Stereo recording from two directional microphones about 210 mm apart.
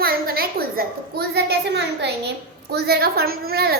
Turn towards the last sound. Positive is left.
turn(degrees=-50)  # may be behind; listen again after turning